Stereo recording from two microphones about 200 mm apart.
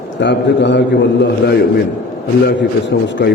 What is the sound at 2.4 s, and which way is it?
Speech, 60° left (ahead or behind).